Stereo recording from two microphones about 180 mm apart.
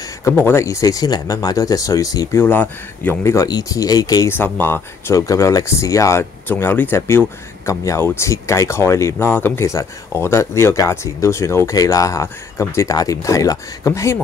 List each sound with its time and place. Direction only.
0.0 s speech: 15° left (ahead or behind)